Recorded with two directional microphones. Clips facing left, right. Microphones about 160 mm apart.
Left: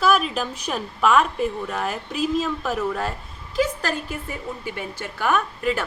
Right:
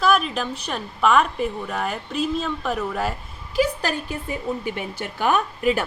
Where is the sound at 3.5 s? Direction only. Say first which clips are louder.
Right 1 dB; 15° right (ahead or behind).